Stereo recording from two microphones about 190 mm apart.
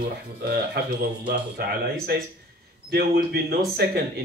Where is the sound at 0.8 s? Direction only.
60° right (ahead or behind).